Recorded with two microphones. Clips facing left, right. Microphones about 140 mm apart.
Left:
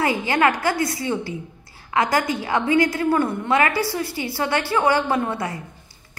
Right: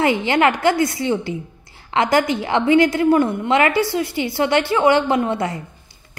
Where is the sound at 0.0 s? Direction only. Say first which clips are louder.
Right 3 dB; 25° right (ahead or behind).